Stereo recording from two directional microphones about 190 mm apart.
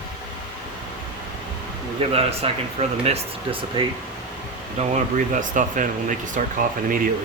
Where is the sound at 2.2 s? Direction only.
30° right (ahead or behind).